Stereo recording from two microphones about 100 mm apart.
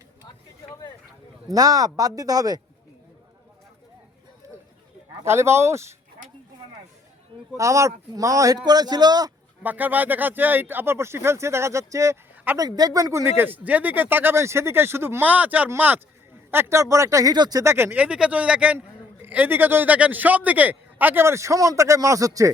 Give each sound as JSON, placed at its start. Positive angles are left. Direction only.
{"t": 1.5, "sound": "speech", "side_deg": -35}
{"t": 5.2, "sound": "a man's voice", "side_deg": -25}
{"t": 7.5, "sound": "speech", "side_deg": -30}
{"t": 9.6, "sound": "a man's voice", "side_deg": -15}
{"t": 17.3, "sound": "speech", "side_deg": -45}
{"t": 17.6, "sound": "a man's voice", "side_deg": -25}